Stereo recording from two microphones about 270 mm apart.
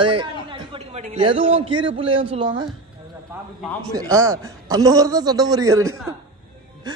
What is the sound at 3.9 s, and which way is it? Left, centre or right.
A man's voice, centre.